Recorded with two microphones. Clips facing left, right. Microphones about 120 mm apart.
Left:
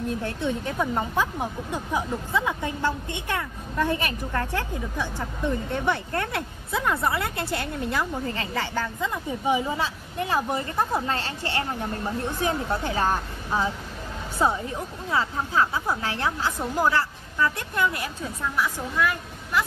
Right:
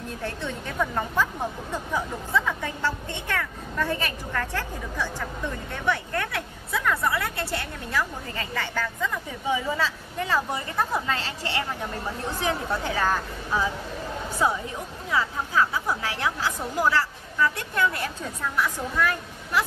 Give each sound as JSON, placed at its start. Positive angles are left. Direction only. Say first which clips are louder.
{"t": 0.2, "sound": "speech", "louder": "left 4 dB", "side_deg": 15}
{"t": 12.4, "sound": "a woman's voice", "louder": "right 1 dB", "side_deg": 25}
{"t": 18.0, "sound": "a woman's voice", "louder": "even", "side_deg": 5}